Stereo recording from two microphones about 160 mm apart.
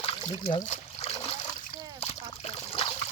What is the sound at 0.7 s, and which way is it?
Splash, 40° left (ahead or behind).